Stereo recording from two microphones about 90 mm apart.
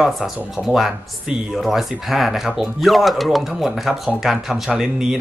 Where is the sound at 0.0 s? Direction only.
5° right (ahead or behind).